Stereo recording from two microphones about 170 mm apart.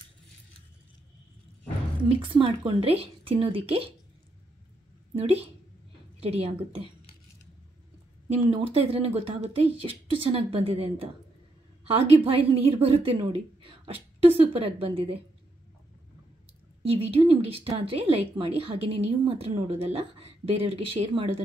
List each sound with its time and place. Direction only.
2.1 s a woman's voice: 30° right (ahead or behind)
5.1 s a woman's voice: 35° right (ahead or behind)
8.3 s a woman's voice: 30° right (ahead or behind)
16.8 s a woman's voice: 35° right (ahead or behind)